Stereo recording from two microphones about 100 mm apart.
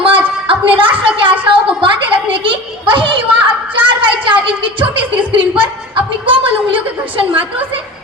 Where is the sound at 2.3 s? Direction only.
60° right (ahead or behind).